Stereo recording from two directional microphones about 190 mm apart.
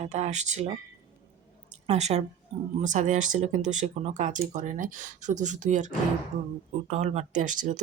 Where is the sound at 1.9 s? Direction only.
35° right (ahead or behind).